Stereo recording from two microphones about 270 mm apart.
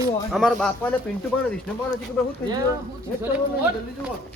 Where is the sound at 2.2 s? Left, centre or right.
Centre.